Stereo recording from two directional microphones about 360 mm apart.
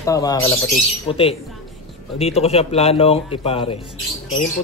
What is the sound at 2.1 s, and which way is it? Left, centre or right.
Speech, centre.